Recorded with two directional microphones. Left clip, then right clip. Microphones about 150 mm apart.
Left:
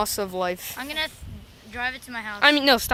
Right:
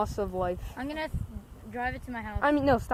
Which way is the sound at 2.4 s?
10° left (ahead or behind).